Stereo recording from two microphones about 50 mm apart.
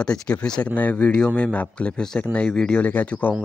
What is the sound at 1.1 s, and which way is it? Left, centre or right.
Speech, centre.